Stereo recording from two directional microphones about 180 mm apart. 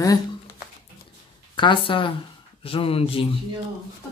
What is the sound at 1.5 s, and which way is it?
Speech, 25° left (ahead or behind).